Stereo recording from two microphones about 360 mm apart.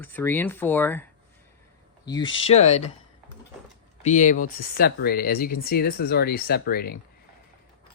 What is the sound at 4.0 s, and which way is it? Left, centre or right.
Speech, centre.